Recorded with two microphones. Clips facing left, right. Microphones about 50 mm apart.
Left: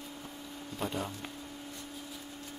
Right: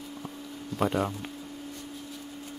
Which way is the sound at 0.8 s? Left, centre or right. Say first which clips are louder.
Right 9 dB; right.